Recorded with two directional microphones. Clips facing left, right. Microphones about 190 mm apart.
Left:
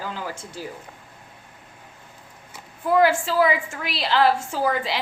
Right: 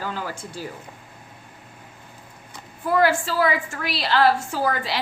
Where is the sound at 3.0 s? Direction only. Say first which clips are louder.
Even; 25° left (ahead or behind).